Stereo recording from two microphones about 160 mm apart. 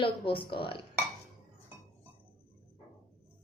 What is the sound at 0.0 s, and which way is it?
Speech, 30° left (ahead or behind).